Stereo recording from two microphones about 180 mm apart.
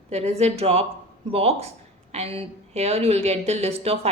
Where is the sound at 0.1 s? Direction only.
35° right (ahead or behind).